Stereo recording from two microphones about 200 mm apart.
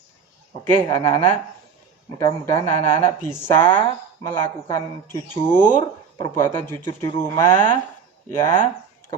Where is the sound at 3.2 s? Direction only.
15° left (ahead or behind).